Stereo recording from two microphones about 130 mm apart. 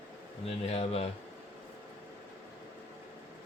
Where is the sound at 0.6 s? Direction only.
50° left (ahead or behind).